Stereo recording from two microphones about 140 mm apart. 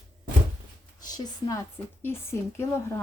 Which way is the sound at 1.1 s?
25° left (ahead or behind).